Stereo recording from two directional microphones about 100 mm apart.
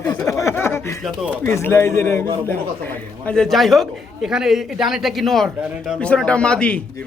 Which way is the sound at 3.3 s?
5° left (ahead or behind).